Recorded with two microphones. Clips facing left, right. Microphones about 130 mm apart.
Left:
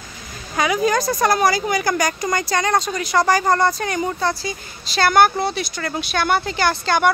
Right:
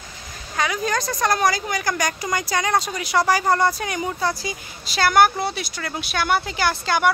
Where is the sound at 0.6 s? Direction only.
10° left (ahead or behind).